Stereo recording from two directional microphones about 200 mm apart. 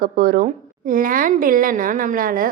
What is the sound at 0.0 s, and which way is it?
A woman's voice, 45° right (ahead or behind).